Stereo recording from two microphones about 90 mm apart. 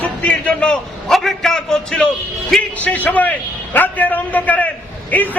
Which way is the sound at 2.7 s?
20° left (ahead or behind).